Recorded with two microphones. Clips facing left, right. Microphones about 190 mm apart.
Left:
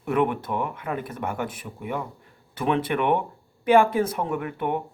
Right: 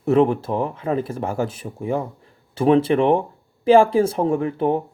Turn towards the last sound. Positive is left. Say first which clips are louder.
# right 7 dB
turn(degrees=-30)  # may be behind; listen again after turning